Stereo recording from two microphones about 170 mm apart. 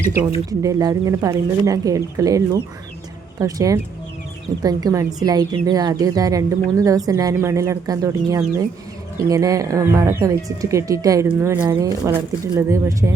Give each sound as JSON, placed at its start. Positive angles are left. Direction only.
{"t": 0.6, "sound": "a woman's voice", "side_deg": -20}